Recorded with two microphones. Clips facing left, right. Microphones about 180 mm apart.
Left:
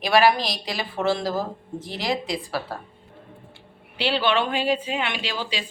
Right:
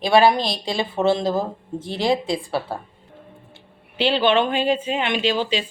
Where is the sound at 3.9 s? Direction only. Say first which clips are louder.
Right 4 dB; 20° right (ahead or behind).